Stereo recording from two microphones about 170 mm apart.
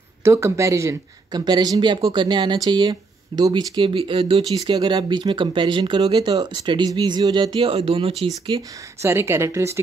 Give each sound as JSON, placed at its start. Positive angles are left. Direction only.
{"t": 0.2, "sound": "speech", "side_deg": -15}
{"t": 9.0, "sound": "speech", "side_deg": -15}